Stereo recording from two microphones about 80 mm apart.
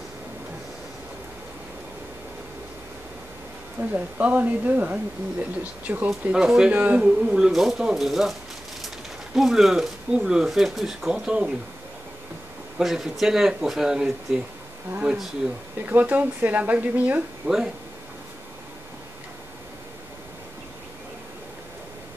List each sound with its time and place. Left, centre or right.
3.9 s speech: centre
6.3 s speech: centre
6.7 s speech: centre
12.7 s speech: centre
15.8 s speech: right